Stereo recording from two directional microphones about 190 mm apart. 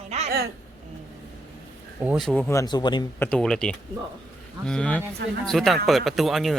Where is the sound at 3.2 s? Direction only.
5° left (ahead or behind).